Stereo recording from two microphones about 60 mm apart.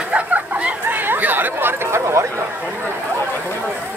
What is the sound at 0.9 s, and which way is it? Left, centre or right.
Chatter, right.